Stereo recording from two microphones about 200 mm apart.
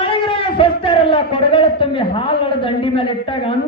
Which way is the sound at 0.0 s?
25° left (ahead or behind).